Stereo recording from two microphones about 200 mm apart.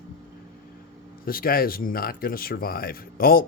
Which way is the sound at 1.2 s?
45° left (ahead or behind).